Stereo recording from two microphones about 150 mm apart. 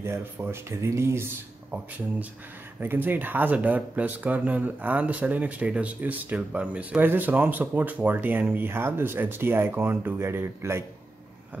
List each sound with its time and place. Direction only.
0.0 s speech: 15° right (ahead or behind)